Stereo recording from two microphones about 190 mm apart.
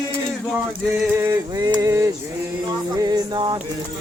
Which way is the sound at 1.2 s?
20° right (ahead or behind).